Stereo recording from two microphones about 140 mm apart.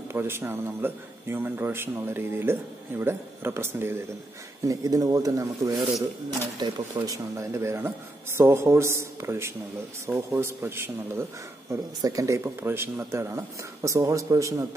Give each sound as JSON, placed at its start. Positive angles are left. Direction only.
{"t": 0.1, "sound": "speech", "side_deg": -20}